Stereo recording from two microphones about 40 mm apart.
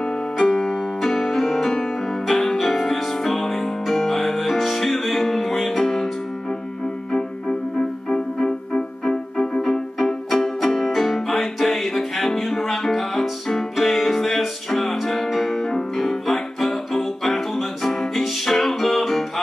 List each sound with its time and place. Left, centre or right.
0.0 s music: centre
7.1 s music: centre